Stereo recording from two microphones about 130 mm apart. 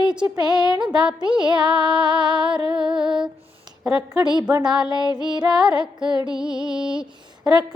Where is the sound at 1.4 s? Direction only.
35° right (ahead or behind).